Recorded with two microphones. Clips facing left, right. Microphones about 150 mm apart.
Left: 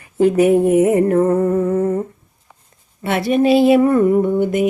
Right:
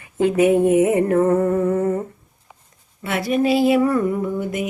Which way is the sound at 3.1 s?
25° left (ahead or behind).